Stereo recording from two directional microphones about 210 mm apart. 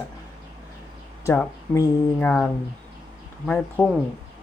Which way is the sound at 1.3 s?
15° left (ahead or behind).